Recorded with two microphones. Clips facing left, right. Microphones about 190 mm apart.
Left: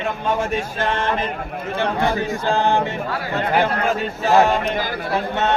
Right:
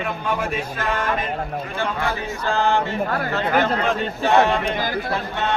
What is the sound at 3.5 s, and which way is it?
A man's voice, 5° left (ahead or behind).